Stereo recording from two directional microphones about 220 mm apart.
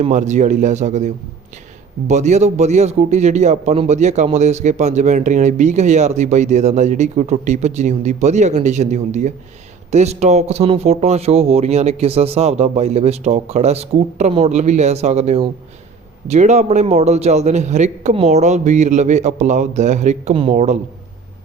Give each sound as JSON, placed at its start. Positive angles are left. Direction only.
{"t": 0.0, "sound": "a man's voice", "side_deg": -35}